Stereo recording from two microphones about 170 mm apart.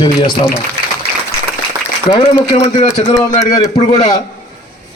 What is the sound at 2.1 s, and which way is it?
Speech, 30° left (ahead or behind).